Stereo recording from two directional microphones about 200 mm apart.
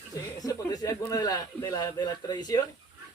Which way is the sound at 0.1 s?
20° left (ahead or behind).